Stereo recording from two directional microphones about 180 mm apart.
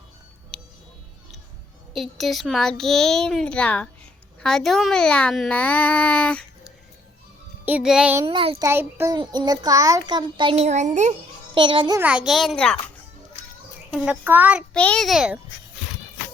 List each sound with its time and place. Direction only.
2.0 s a child's voice: centre (ahead or behind)
7.6 s speech: 5° right (ahead or behind)
8.3 s a child's voice: 30° right (ahead or behind)
8.6 s a child's voice: 15° right (ahead or behind); by 11.1 s 45° right (ahead or behind)
11.5 s a child's voice: 30° right (ahead or behind)
11.9 s a child's voice: 5° right (ahead or behind)
13.9 s speech: 5° right (ahead or behind)
14.7 s a child's voice: 5° left (ahead or behind)